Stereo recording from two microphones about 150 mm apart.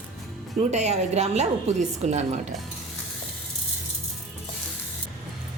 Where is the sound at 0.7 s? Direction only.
50° right (ahead or behind).